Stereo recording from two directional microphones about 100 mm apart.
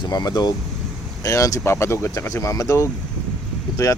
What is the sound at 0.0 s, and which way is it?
Speech, 45° left (ahead or behind).